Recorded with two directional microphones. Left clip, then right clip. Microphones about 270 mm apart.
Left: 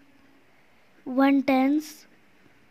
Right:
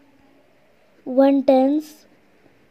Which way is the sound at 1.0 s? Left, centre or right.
Centre.